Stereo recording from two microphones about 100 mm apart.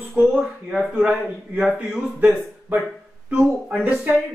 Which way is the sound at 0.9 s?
15° right (ahead or behind).